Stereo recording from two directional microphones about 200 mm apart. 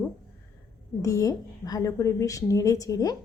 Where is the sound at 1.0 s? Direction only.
15° left (ahead or behind).